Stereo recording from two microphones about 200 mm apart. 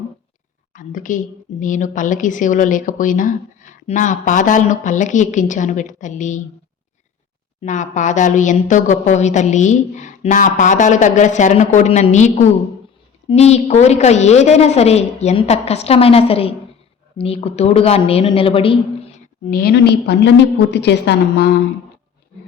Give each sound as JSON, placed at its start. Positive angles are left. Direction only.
{"t": 0.7, "sound": "a woman's voice", "side_deg": 40}
{"t": 7.6, "sound": "a woman's voice", "side_deg": 35}
{"t": 19.5, "sound": "a woman's voice", "side_deg": 50}